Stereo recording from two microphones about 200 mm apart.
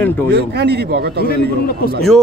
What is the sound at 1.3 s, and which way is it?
Speech, 50° left (ahead or behind).